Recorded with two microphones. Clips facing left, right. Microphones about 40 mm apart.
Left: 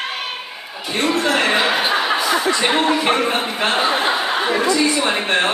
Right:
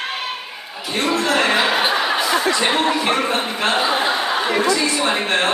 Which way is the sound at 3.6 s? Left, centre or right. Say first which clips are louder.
Even; centre.